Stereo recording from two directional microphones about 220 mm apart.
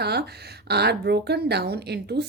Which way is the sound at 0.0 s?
45° right (ahead or behind).